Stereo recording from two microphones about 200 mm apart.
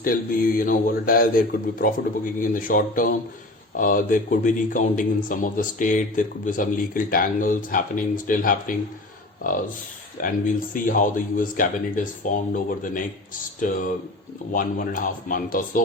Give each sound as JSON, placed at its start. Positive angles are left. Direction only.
{"t": 0.0, "sound": "speech", "side_deg": 45}
{"t": 13.6, "sound": "speech", "side_deg": 45}